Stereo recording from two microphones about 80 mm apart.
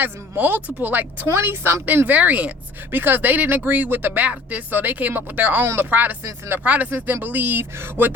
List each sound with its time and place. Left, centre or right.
0.0 s speech: right
2.0 s speech: centre